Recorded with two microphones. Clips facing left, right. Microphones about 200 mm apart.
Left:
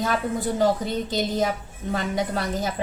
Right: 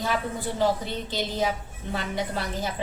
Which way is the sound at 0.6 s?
45° left (ahead or behind).